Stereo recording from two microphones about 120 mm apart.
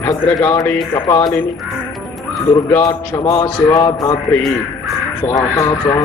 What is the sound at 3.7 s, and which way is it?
Speech, 30° left (ahead or behind).